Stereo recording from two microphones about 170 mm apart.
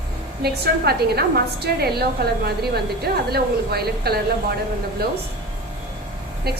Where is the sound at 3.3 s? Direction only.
70° right (ahead or behind).